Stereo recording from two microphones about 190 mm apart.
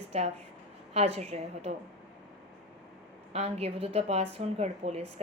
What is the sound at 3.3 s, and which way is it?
A woman's voice, 35° right (ahead or behind).